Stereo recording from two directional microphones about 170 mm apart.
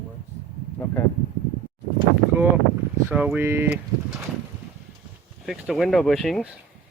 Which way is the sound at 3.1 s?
10° right (ahead or behind).